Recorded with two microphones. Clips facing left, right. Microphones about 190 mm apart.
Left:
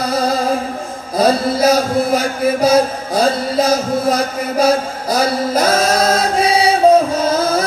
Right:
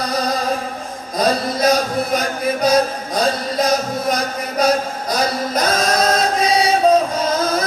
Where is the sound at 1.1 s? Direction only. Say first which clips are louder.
Left 4 dB; 25° left (ahead or behind).